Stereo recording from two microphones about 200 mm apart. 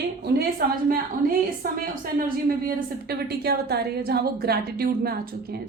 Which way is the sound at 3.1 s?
50° right (ahead or behind).